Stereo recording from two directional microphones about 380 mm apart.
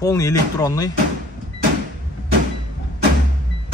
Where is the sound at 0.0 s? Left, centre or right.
Centre.